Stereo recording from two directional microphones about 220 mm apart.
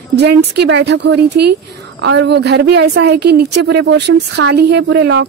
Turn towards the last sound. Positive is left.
turn(degrees=-50)  # may be behind; listen again after turning